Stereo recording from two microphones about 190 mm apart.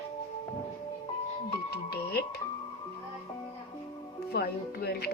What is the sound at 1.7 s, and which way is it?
Speech, 55° left (ahead or behind).